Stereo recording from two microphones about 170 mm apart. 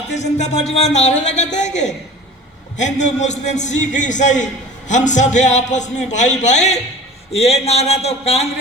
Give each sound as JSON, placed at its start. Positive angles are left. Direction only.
{"t": 0.1, "sound": "a man's voice", "side_deg": 45}